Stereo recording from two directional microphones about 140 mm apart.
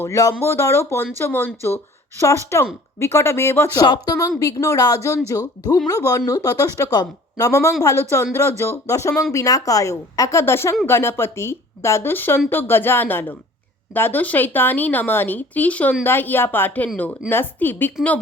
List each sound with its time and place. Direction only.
0.0 s a woman's voice: 20° left (ahead or behind)